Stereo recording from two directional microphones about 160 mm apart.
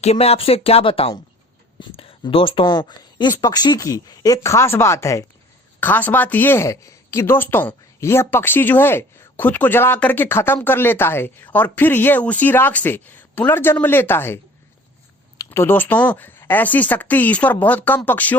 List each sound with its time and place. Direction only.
0.0 s speech: 40° left (ahead or behind); by 14.3 s 15° left (ahead or behind)
15.4 s speech: 15° left (ahead or behind)